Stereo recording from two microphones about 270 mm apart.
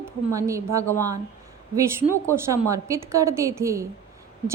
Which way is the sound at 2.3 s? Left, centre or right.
Centre.